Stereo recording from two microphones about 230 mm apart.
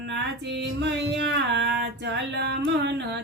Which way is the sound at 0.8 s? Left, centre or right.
Right.